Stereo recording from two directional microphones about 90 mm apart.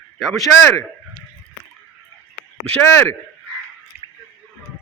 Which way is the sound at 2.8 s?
25° left (ahead or behind).